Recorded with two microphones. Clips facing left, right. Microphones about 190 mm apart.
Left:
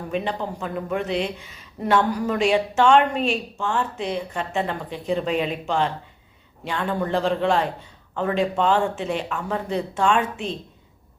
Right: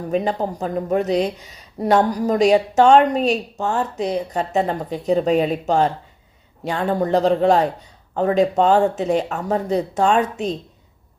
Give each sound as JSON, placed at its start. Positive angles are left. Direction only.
{"t": 0.1, "sound": "a woman's voice", "side_deg": -40}